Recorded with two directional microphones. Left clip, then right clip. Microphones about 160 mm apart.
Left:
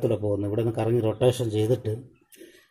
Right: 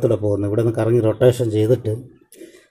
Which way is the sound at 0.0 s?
5° right (ahead or behind).